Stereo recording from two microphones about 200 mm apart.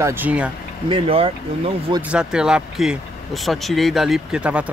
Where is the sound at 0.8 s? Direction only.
25° right (ahead or behind).